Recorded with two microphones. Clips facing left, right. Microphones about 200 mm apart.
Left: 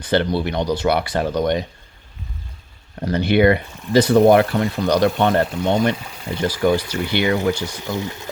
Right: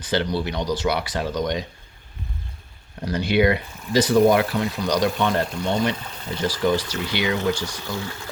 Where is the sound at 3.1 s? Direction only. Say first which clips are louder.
Left 4 dB; 60° left (ahead or behind).